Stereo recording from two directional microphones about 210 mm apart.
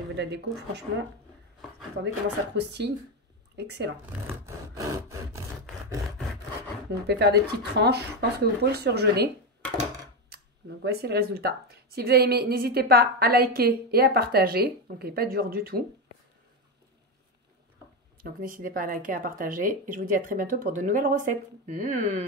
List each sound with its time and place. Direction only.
0.1 s speech: 55° right (ahead or behind)
2.2 s speech: 55° right (ahead or behind)
4.7 s sawing: 15° right (ahead or behind)
6.9 s speech: 50° right (ahead or behind)
10.3 s speech: 50° right (ahead or behind)
18.2 s speech: 40° right (ahead or behind)